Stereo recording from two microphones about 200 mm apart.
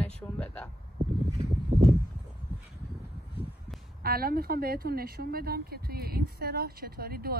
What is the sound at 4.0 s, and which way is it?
Speech, 50° right (ahead or behind).